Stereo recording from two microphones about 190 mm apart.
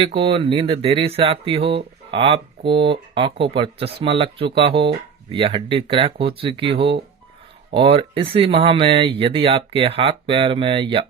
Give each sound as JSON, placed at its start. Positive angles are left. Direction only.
{"t": 0.0, "sound": "speech", "side_deg": -30}